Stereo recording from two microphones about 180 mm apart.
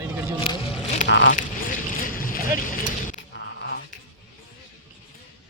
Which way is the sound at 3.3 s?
85° left.